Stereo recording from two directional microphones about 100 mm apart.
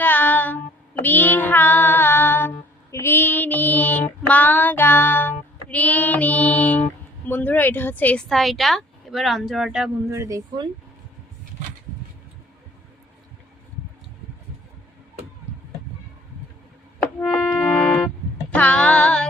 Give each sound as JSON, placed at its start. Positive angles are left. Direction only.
{"t": 0.0, "sound": "child singing", "side_deg": 15}
{"t": 5.7, "sound": "female singing", "side_deg": 15}
{"t": 8.3, "sound": "speech", "side_deg": 0}
{"t": 10.1, "sound": "speech", "side_deg": -30}
{"t": 17.2, "sound": "music", "side_deg": 10}
{"t": 18.5, "sound": "female singing", "side_deg": 15}